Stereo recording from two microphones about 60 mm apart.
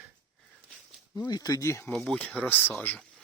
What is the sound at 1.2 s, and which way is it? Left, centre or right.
Speech, left.